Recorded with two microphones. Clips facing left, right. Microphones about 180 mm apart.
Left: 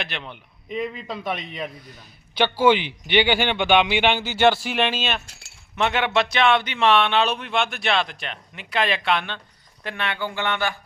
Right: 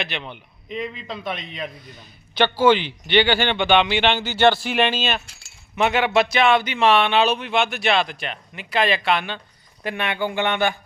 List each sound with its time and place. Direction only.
0.0 s a man's voice: centre (ahead or behind); by 10.8 s 20° right (ahead or behind)